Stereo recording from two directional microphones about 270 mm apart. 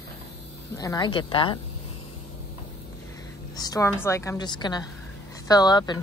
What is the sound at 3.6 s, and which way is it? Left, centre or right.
A woman's voice, centre.